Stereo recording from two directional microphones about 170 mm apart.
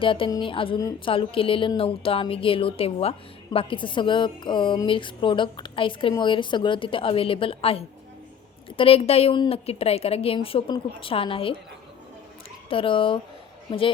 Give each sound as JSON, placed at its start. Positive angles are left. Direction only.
{"t": 0.0, "sound": "speech", "side_deg": 30}
{"t": 12.6, "sound": "a woman's voice", "side_deg": 30}